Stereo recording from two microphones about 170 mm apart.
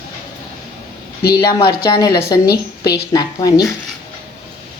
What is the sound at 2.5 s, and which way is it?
Speech, 70° left (ahead or behind).